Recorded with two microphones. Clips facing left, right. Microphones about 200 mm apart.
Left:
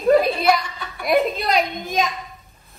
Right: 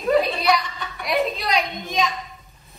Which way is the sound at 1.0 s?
50° left (ahead or behind).